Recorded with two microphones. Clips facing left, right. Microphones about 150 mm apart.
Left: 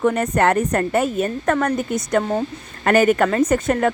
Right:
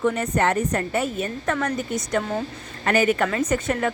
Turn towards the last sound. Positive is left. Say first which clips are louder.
# left 5 dB
turn(degrees=45)  # may be behind; listen again after turning